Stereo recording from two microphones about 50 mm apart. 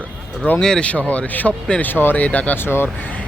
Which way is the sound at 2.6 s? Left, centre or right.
Left.